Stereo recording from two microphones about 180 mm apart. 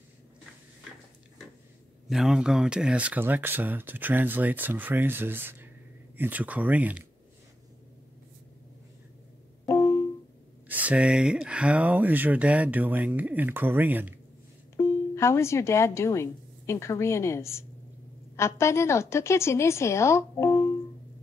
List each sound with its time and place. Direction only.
2.0 s speech: centre (ahead or behind)
9.7 s music: 15° left (ahead or behind)
10.7 s speech: 5° right (ahead or behind)
14.8 s a woman's voice: 15° left (ahead or behind)